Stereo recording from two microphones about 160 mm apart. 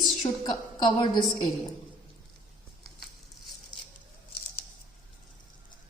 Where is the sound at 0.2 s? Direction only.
30° left (ahead or behind).